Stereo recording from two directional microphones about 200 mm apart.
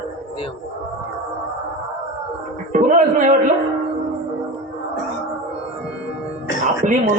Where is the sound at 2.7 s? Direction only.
40° right (ahead or behind).